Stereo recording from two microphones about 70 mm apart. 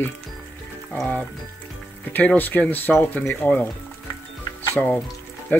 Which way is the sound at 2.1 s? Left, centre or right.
Left.